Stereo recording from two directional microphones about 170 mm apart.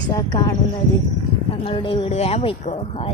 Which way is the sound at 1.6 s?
30° left (ahead or behind).